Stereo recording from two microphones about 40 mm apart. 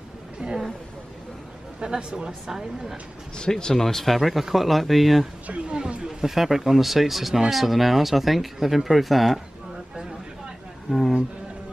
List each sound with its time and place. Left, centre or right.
0.4 s a sound: right
1.8 s a man's voice: centre
3.3 s speech: centre
3.8 s speech: centre
5.5 s a man's voice: right
6.0 s speech: centre
10.9 s speech: centre